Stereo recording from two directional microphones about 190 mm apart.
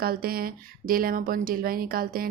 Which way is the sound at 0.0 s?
50° right (ahead or behind).